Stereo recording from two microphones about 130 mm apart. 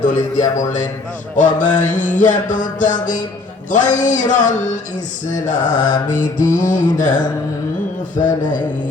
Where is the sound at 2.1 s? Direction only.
80° left.